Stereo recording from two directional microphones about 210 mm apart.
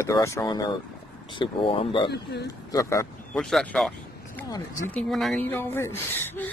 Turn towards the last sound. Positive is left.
turn(degrees=10)  # may be behind; listen again after turning